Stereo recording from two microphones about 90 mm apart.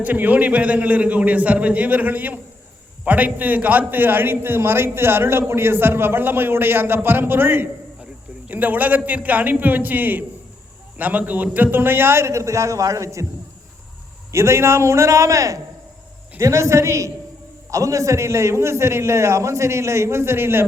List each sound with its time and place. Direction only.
0.0 s a man's voice: 20° right (ahead or behind); by 13.2 s 35° right (ahead or behind)
14.3 s a man's voice: 30° right (ahead or behind)